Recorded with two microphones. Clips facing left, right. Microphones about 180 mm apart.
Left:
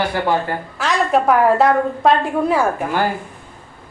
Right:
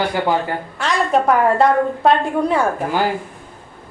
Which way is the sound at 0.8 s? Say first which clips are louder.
Even; centre (ahead or behind).